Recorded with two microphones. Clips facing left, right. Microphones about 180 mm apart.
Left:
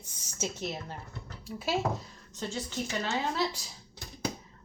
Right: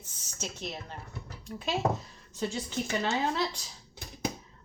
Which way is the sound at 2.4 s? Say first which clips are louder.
Right 4 dB; 10° right (ahead or behind).